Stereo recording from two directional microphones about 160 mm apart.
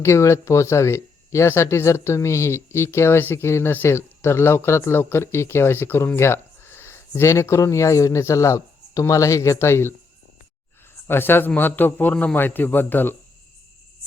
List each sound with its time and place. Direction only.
0.0 s speech: 15° left (ahead or behind)
11.1 s speech: 15° left (ahead or behind)